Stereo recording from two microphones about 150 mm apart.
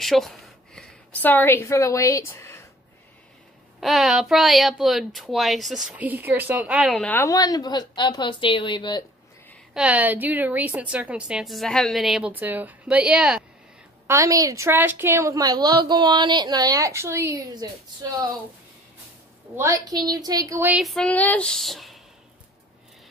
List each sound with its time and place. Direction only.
0.0 s speech: centre (ahead or behind); by 2.6 s 20° left (ahead or behind)
3.8 s a child's voice: centre (ahead or behind)
7.0 s a woman's voice: 10° left (ahead or behind)
7.2 s speech: 25° left (ahead or behind)
9.8 s a woman's voice: 10° right (ahead or behind)
14.0 s a woman's voice: 20° right (ahead or behind)
19.5 s a woman's voice: 20° right (ahead or behind)
20.7 s a child's voice: centre (ahead or behind)